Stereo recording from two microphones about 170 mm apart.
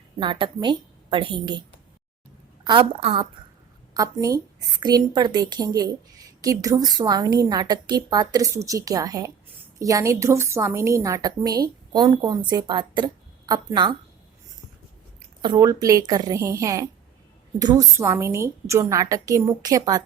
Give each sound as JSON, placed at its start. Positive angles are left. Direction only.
{"t": 0.2, "sound": "a woman's voice", "side_deg": -30}
{"t": 2.6, "sound": "a woman's voice", "side_deg": -30}
{"t": 3.9, "sound": "a woman's voice", "side_deg": -20}
{"t": 15.4, "sound": "a woman's voice", "side_deg": -25}